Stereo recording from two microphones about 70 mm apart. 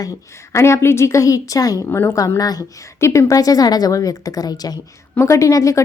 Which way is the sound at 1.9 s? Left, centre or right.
Left.